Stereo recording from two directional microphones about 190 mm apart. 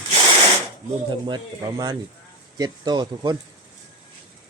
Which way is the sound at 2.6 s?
20° right (ahead or behind).